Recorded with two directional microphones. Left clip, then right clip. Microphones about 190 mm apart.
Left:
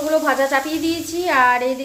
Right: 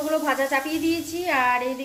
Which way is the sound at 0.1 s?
10° left (ahead or behind).